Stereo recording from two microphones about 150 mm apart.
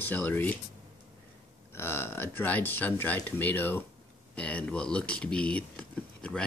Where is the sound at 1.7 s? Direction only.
15° left (ahead or behind).